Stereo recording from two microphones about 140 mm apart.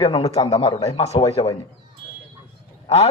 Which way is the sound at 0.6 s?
40° left (ahead or behind).